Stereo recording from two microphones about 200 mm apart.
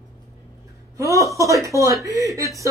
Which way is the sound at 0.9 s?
15° right (ahead or behind).